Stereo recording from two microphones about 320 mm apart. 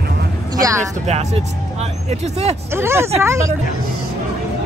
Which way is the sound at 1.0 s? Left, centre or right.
Centre.